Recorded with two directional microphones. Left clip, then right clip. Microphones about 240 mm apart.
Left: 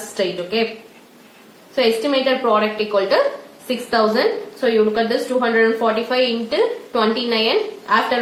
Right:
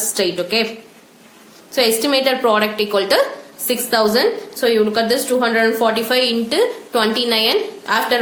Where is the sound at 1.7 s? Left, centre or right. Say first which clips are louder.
Right 1 dB; right.